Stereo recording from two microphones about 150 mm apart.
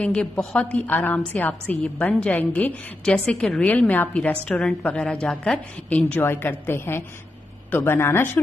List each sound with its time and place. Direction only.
0.0 s a woman's voice: 5° left (ahead or behind)